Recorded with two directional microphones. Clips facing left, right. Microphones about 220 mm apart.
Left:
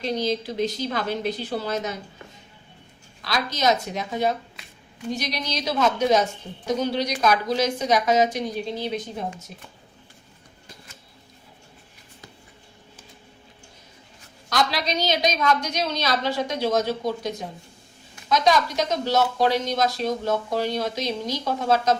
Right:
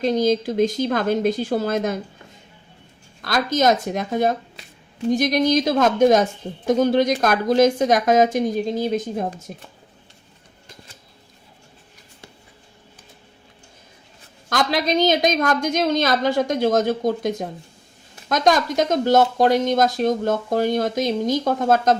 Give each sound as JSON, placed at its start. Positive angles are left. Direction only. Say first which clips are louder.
{"t": 0.0, "sound": "speech", "louder": "right 7 dB", "side_deg": -45}
{"t": 3.2, "sound": "speech", "louder": "right 7 dB", "side_deg": -50}
{"t": 14.5, "sound": "speech", "louder": "right 4 dB", "side_deg": -50}